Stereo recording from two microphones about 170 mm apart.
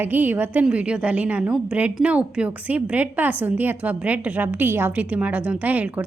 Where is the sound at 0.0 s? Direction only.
10° right (ahead or behind).